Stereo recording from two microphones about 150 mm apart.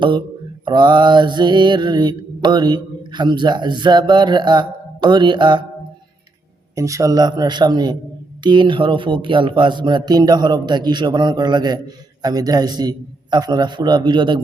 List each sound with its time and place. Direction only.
0.6 s mantra: 30° right (ahead or behind)
6.7 s mantra: 20° right (ahead or behind)